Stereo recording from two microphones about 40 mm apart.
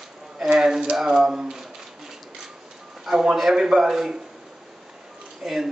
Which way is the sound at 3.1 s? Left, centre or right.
Centre.